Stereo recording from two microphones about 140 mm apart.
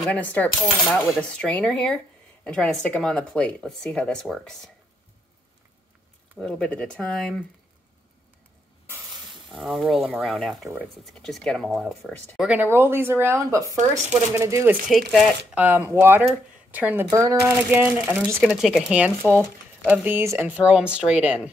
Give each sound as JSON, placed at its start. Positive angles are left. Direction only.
{"t": 0.1, "sound": "speech", "side_deg": 10}
{"t": 6.3, "sound": "speech", "side_deg": 5}
{"t": 9.1, "sound": "a sound", "side_deg": -35}
{"t": 9.6, "sound": "speech", "side_deg": 0}
{"t": 12.4, "sound": "speech", "side_deg": -10}
{"t": 14.9, "sound": "speech", "side_deg": 0}
{"t": 15.5, "sound": "speech", "side_deg": -10}
{"t": 18.5, "sound": "speech", "side_deg": 0}